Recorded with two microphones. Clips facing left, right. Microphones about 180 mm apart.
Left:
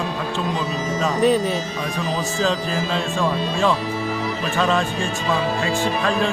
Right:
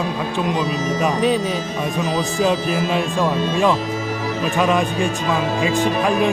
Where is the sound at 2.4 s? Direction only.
15° right (ahead or behind).